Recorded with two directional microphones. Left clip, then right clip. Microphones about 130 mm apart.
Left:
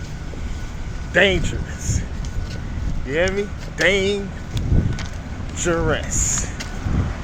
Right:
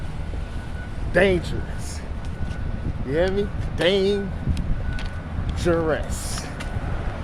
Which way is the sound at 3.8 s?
45° right (ahead or behind).